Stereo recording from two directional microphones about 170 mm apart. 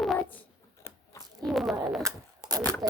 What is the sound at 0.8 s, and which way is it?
Biting, 15° left (ahead or behind).